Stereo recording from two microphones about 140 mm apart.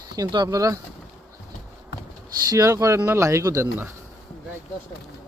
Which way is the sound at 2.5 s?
25° right (ahead or behind).